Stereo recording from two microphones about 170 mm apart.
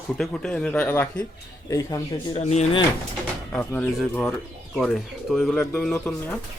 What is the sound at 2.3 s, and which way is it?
Speech, 40° left (ahead or behind).